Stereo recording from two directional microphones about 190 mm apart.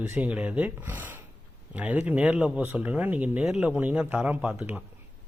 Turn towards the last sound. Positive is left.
turn(degrees=-5)  # may be behind; listen again after turning